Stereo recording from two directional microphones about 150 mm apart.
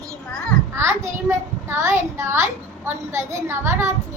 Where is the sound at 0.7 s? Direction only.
20° right (ahead or behind).